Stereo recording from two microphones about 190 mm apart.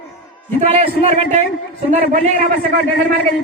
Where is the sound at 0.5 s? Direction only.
30° right (ahead or behind).